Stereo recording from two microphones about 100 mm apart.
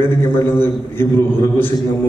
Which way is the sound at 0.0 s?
20° left (ahead or behind).